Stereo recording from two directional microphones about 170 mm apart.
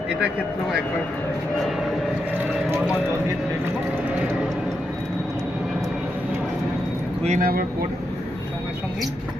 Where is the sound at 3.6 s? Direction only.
10° right (ahead or behind).